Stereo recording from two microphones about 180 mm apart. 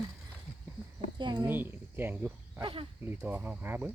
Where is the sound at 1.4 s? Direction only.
10° right (ahead or behind).